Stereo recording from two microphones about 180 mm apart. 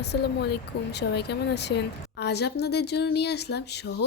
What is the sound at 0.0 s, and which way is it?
Speech, 70° left (ahead or behind).